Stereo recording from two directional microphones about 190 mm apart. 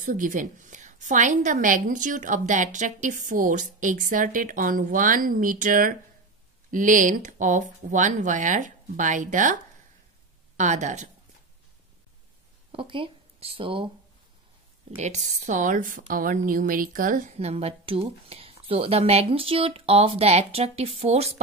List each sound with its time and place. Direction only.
0.0 s a woman's voice: 45° right (ahead or behind)
10.6 s a woman's voice: 40° right (ahead or behind)
12.7 s speech: 25° right (ahead or behind)
15.0 s a woman's voice: 40° right (ahead or behind)